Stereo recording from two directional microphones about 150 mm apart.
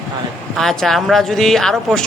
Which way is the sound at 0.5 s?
5° left (ahead or behind).